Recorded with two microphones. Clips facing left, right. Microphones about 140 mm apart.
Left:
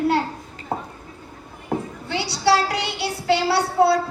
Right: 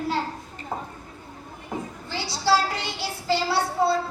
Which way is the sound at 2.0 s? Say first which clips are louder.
Left 4 dB; 70° left (ahead or behind).